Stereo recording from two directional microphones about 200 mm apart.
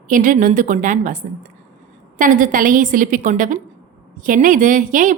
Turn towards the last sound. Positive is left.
turn(degrees=-40)  # may be behind; listen again after turning